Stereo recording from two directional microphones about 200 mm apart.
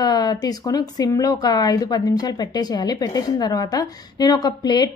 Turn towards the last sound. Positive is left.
turn(degrees=20)  # may be behind; listen again after turning